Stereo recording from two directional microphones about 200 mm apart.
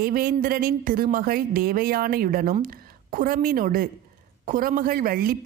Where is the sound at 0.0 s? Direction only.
45° right (ahead or behind).